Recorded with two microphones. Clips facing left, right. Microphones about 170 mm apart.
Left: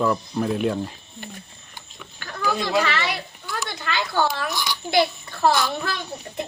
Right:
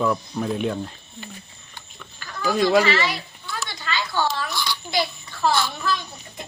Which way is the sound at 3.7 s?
60° left (ahead or behind).